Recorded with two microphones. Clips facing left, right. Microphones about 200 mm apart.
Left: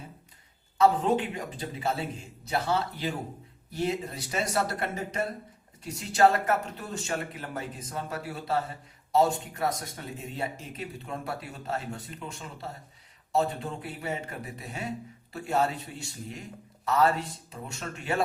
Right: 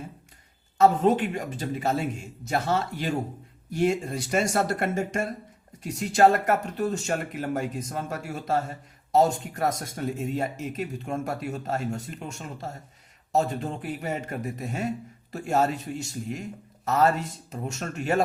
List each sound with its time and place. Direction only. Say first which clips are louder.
0.8 s speech: right 3 dB; 45° right (ahead or behind)